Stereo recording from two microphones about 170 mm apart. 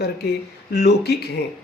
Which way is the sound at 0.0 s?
75° left (ahead or behind).